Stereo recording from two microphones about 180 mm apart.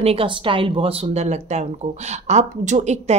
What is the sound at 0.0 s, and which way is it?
Speech, 30° right (ahead or behind).